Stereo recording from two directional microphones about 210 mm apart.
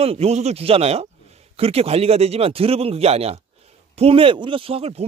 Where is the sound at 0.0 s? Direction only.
30° right (ahead or behind).